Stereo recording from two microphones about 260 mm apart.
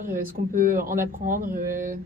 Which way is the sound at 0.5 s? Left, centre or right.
Right.